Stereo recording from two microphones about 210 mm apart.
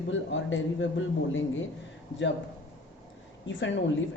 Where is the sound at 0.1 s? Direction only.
65° left (ahead or behind).